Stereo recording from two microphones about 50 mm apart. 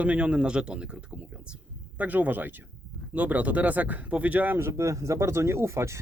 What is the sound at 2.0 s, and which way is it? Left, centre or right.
Speech, right.